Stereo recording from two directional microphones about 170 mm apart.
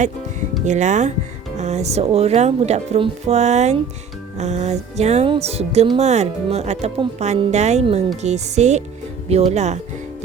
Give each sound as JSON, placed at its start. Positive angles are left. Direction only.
{"t": 0.6, "sound": "speech", "side_deg": -45}
{"t": 1.5, "sound": "music", "side_deg": -40}